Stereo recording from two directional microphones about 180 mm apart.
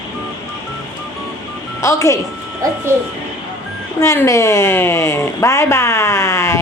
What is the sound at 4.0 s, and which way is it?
A woman's voice, 15° left (ahead or behind).